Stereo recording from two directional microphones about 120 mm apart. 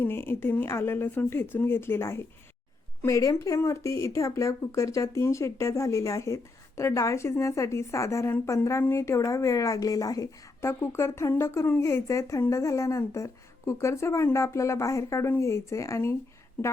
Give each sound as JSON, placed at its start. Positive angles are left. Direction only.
{"t": 0.0, "sound": "speech", "side_deg": 20}